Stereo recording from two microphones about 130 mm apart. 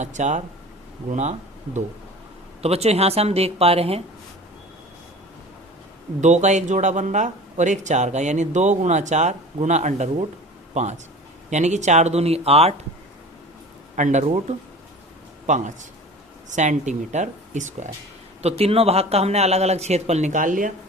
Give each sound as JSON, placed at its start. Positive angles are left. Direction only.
{"t": 0.0, "sound": "speech", "side_deg": -65}
{"t": 6.1, "sound": "speech", "side_deg": -65}
{"t": 13.9, "sound": "speech", "side_deg": -70}
{"t": 15.4, "sound": "speech", "side_deg": -70}
{"t": 18.4, "sound": "speech", "side_deg": -50}